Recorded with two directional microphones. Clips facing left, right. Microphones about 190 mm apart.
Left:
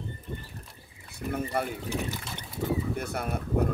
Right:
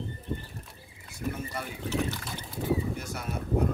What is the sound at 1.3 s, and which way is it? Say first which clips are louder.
Speech: left 7 dB; 60° left (ahead or behind).